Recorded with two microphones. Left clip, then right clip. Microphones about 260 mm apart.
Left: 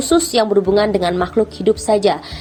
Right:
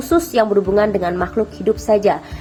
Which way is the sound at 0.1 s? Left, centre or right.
Left.